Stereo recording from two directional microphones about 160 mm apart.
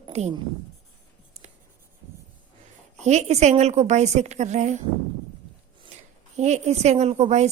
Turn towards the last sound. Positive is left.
turn(degrees=-45)  # may be behind; listen again after turning